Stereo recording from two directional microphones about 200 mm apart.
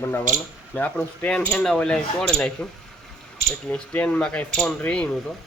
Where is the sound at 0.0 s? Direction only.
15° left (ahead or behind).